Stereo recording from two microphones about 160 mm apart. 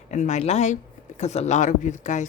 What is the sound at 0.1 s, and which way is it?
Speech, 45° left (ahead or behind).